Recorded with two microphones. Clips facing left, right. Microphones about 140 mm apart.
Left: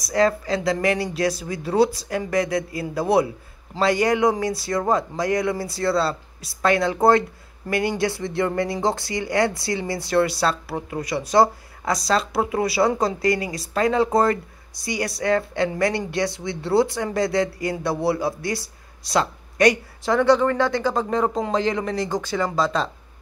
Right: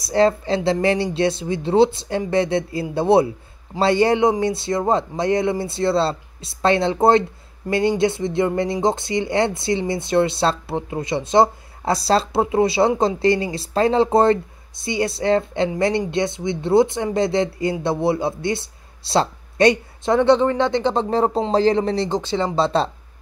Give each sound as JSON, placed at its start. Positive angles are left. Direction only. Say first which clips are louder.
{"t": 0.0, "sound": "speech", "louder": "right 3 dB", "side_deg": -30}